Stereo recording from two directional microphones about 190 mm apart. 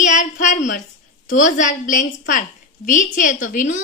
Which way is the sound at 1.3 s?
40° left (ahead or behind).